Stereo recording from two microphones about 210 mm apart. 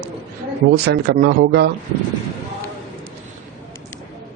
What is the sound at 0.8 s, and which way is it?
Speech, 50° right (ahead or behind).